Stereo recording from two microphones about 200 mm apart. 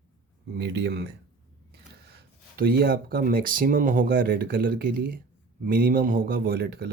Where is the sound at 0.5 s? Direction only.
60° right (ahead or behind).